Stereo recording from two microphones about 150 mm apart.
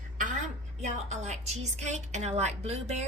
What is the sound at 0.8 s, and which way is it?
A woman's voice, 50° right (ahead or behind).